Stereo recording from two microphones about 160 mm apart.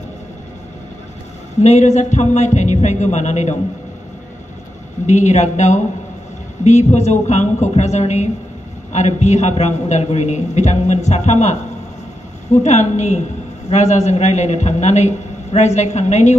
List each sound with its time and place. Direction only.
1.6 s a man's voice: 45° left (ahead or behind)
5.0 s a man's voice: 45° left (ahead or behind)